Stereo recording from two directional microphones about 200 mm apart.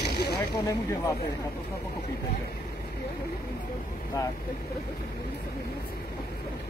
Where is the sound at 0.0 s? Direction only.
55° left (ahead or behind).